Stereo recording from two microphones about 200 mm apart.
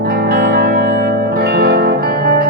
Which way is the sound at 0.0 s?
50° right (ahead or behind).